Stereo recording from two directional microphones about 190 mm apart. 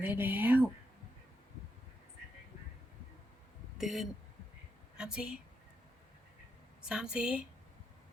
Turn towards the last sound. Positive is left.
turn(degrees=-5)  # may be behind; listen again after turning